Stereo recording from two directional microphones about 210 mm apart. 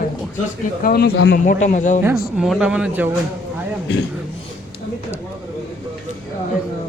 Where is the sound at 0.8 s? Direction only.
50° left (ahead or behind).